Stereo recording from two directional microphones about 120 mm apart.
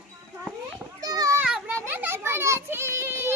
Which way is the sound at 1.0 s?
30° right (ahead or behind).